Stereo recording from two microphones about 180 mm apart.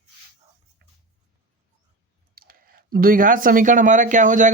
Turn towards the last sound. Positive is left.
turn(degrees=-45)  # may be behind; listen again after turning